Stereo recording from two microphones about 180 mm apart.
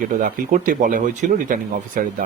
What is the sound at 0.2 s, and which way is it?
Speech, 50° right (ahead or behind).